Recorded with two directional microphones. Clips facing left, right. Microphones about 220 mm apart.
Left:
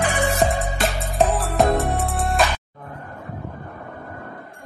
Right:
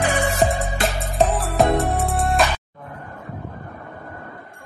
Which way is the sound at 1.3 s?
Centre (ahead or behind).